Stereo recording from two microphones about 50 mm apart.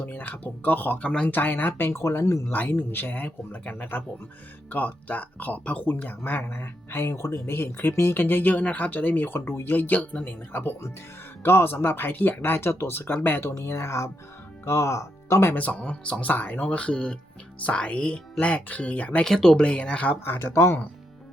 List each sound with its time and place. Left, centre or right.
0.0 s speech: left
1.9 s speech: left
2.5 s speech: left
6.9 s speech: left
8.1 s speech: left
10.2 s speech: left
13.5 s speech: left
15.5 s speech: left
16.3 s speech: left
16.6 s speech: left
19.2 s speech: centre
20.2 s speech: left
20.5 s speech: left